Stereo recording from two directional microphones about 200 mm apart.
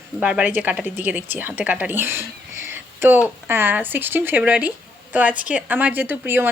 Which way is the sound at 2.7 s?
10° right (ahead or behind).